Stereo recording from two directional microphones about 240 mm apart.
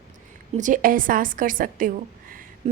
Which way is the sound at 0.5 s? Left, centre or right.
Right.